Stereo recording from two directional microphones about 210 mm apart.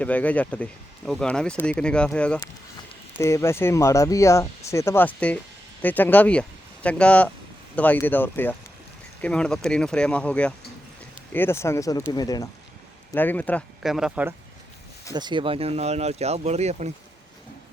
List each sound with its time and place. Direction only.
0.0 s speech: 5° left (ahead or behind)
15.1 s speech: 20° right (ahead or behind)